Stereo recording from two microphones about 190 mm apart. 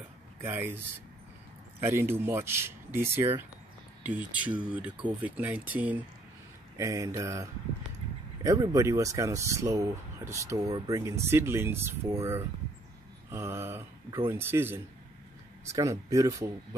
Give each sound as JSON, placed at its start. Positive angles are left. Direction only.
{"t": 0.4, "sound": "speech", "side_deg": -10}
{"t": 8.5, "sound": "speech", "side_deg": -15}
{"t": 13.3, "sound": "a sound", "side_deg": -15}
{"t": 14.3, "sound": "speech", "side_deg": -10}